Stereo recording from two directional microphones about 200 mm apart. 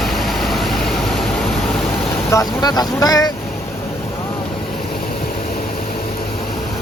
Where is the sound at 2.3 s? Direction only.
15° left (ahead or behind).